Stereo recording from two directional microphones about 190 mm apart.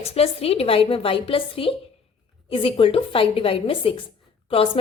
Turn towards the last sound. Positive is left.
turn(degrees=30)  # may be behind; listen again after turning